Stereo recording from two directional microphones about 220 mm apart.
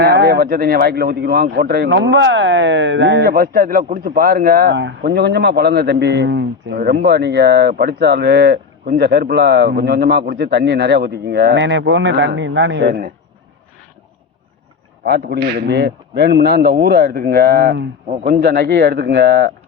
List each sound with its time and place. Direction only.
0.0 s speech: 50° right (ahead or behind)
15.0 s speech: 45° right (ahead or behind)